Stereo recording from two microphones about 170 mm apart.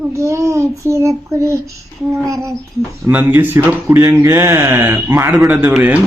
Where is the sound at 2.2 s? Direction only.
20° right (ahead or behind).